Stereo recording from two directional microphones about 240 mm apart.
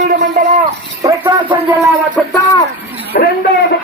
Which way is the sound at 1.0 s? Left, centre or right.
Centre.